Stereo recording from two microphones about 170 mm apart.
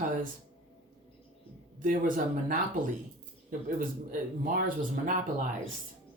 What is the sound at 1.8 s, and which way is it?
Speech, 55° right (ahead or behind).